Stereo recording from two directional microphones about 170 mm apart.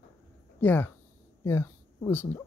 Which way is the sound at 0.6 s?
10° left (ahead or behind).